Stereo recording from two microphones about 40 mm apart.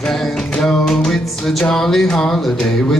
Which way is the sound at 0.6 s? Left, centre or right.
Centre.